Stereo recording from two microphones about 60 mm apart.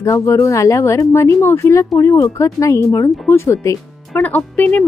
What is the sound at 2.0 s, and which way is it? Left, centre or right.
Speech, left.